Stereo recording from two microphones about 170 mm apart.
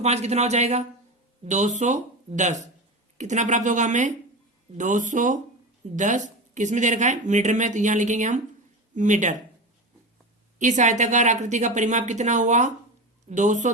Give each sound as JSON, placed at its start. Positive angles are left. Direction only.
{"t": 0.0, "sound": "speech", "side_deg": -40}
{"t": 10.6, "sound": "speech", "side_deg": -45}